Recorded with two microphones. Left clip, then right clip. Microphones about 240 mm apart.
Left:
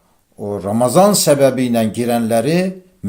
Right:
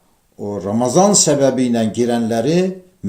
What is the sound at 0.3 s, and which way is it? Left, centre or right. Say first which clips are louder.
A man's voice: left 2 dB; left.